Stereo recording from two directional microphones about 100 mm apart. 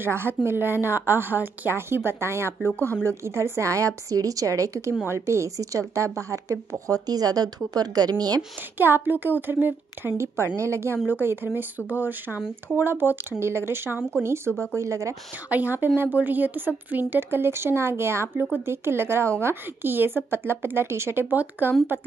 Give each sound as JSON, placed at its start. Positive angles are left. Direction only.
{"t": 0.0, "sound": "speech", "side_deg": -25}
{"t": 8.7, "sound": "speech", "side_deg": -20}
{"t": 14.5, "sound": "speech", "side_deg": 10}
{"t": 14.8, "sound": "speech", "side_deg": -30}
{"t": 15.5, "sound": "speech", "side_deg": -20}